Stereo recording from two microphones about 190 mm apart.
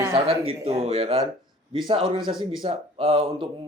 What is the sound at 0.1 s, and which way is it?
Speech, 30° right (ahead or behind).